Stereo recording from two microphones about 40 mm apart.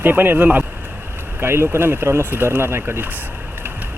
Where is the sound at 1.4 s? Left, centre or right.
Right.